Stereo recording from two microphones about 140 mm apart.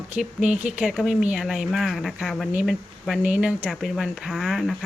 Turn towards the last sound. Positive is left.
turn(degrees=0)  # may be behind; listen again after turning